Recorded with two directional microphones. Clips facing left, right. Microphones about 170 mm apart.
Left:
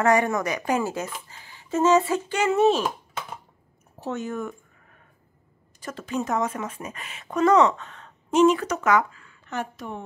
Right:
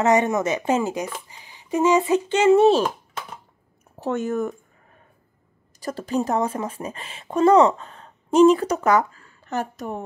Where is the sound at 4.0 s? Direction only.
50° right (ahead or behind).